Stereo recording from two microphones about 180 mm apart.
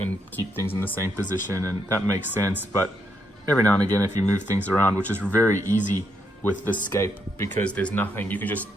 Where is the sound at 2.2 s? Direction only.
10° right (ahead or behind).